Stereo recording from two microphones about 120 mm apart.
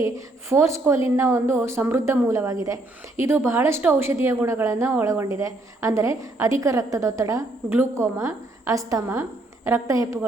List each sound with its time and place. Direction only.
0.0 s a woman's voice: 25° right (ahead or behind)